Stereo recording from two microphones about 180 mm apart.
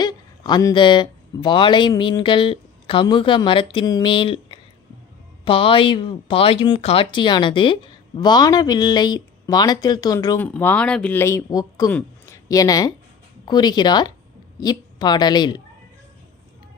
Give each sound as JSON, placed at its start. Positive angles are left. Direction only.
{"t": 0.0, "sound": "speech", "side_deg": 25}
{"t": 10.4, "sound": "speech", "side_deg": 10}
{"t": 11.9, "sound": "a sound", "side_deg": 10}
{"t": 12.5, "sound": "speech", "side_deg": 20}